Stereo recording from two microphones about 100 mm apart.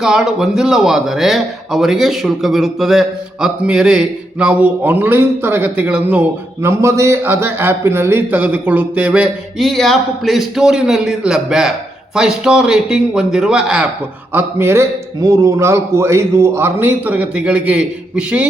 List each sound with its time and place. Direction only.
0.0 s a man's voice: 5° right (ahead or behind)
6.7 s a man's voice: 30° right (ahead or behind); by 9.3 s 10° right (ahead or behind)
9.6 s a man's voice: centre (ahead or behind)
14.3 s a man's voice: 25° right (ahead or behind)